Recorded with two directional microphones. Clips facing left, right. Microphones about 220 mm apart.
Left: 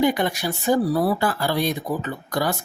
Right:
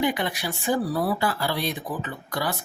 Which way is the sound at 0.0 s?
45° left (ahead or behind).